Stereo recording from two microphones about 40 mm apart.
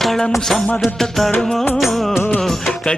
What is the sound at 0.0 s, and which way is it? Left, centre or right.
Music, centre.